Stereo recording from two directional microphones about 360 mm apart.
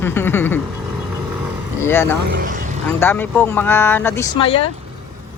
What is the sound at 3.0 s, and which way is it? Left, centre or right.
Speech, centre.